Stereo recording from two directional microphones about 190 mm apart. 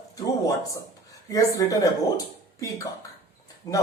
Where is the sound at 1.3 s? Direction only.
20° left (ahead or behind).